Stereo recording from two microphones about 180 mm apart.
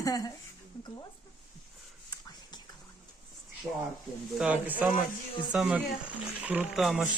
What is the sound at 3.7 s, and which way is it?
Speech, 15° right (ahead or behind).